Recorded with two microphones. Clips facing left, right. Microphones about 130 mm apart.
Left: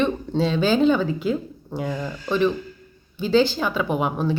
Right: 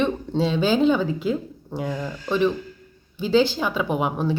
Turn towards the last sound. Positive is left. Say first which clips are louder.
# even
turn(degrees=-10)  # may be behind; listen again after turning